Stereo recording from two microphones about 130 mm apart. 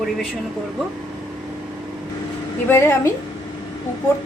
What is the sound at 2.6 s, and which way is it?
Speech, 20° left (ahead or behind).